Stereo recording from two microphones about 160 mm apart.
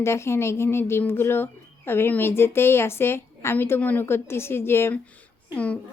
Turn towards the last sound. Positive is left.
turn(degrees=10)  # may be behind; listen again after turning